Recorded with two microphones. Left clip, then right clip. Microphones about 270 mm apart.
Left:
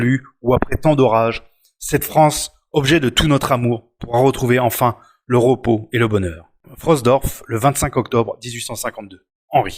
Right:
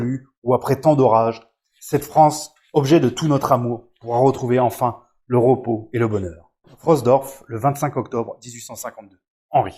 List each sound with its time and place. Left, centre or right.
0.0 s speech: left
3.2 s speech: left
4.4 s speech: left